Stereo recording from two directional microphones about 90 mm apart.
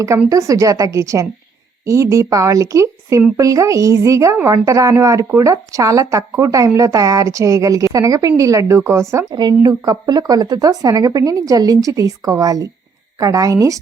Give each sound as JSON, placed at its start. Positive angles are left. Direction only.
{"t": 0.3, "sound": "speech", "side_deg": -35}
{"t": 9.3, "sound": "speech", "side_deg": -50}